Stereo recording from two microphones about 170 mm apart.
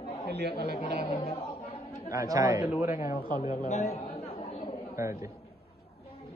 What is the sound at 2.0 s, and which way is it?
Speech, 20° right (ahead or behind).